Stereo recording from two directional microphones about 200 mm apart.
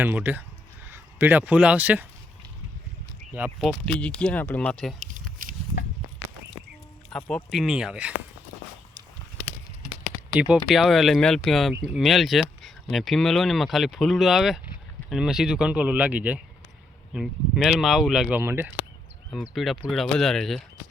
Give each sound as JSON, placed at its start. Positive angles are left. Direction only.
{"t": 0.0, "sound": "speech", "side_deg": -10}
{"t": 3.3, "sound": "speech", "side_deg": -5}
{"t": 4.9, "sound": "a sound", "side_deg": -40}
{"t": 7.1, "sound": "speech", "side_deg": 5}
{"t": 10.7, "sound": "speech", "side_deg": 0}